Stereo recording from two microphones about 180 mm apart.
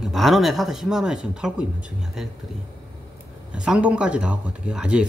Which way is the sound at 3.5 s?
5° right (ahead or behind).